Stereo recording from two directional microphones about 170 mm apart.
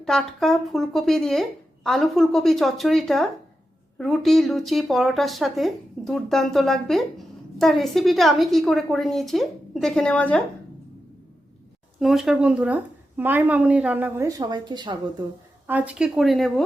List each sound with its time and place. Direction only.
0.0 s speech: 5° left (ahead or behind)
11.9 s speech: centre (ahead or behind)
14.3 s a woman's voice: 25° right (ahead or behind)
15.6 s speech: 10° right (ahead or behind)